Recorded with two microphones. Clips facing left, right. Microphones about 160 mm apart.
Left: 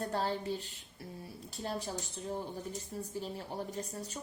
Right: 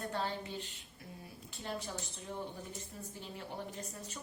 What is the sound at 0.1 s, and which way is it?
A woman's voice, 35° left (ahead or behind).